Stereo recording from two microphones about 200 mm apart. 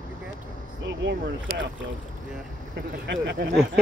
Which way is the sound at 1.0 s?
65° right (ahead or behind).